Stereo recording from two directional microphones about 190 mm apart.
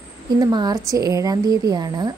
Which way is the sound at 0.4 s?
20° right (ahead or behind).